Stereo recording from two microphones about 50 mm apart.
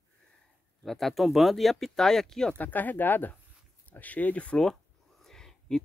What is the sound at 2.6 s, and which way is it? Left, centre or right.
Speech, left.